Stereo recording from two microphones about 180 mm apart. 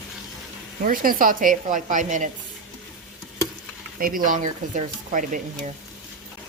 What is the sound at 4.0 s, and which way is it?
Speech, 50° right (ahead or behind).